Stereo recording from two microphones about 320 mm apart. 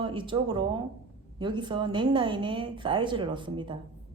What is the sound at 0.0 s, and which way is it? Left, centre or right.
A woman's voice, centre.